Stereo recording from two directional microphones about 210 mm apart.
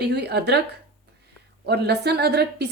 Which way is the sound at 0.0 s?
50° right (ahead or behind).